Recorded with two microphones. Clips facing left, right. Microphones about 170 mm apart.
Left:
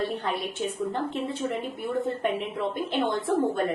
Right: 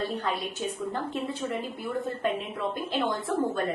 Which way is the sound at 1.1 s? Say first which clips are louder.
Left 2 dB; 25° left (ahead or behind).